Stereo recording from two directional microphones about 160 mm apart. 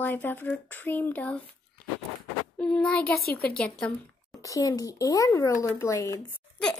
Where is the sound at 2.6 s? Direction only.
5° left (ahead or behind).